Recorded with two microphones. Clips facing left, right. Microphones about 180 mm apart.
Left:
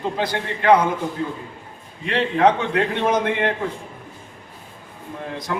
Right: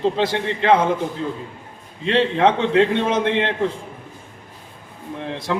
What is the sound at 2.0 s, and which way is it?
A man's voice, 25° right (ahead or behind).